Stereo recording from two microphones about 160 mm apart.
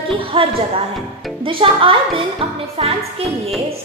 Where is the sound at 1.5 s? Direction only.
35° right (ahead or behind).